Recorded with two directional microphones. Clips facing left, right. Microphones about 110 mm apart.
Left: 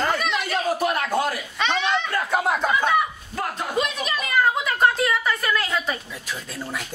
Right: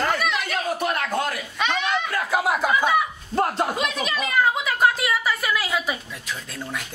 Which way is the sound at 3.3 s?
35° right (ahead or behind).